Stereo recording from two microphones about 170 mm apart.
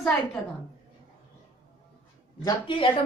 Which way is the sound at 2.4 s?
30° left (ahead or behind).